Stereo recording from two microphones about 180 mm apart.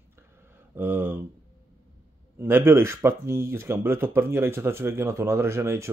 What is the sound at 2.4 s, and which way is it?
Speech, 15° right (ahead or behind).